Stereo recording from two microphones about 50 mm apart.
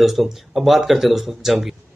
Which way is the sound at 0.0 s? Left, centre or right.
Centre.